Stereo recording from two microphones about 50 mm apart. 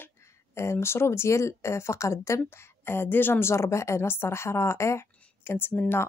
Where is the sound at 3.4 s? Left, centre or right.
Left.